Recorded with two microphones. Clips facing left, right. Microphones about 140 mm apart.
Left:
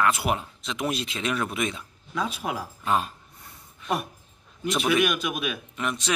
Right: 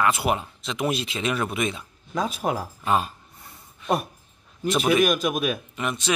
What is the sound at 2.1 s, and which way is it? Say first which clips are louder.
Speech: right 4 dB; 40° right (ahead or behind).